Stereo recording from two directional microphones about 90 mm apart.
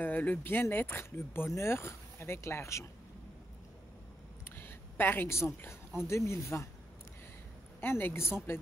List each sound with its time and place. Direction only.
0.0 s speech: 20° left (ahead or behind)
4.5 s speech: 25° left (ahead or behind)
7.8 s speech: 25° left (ahead or behind)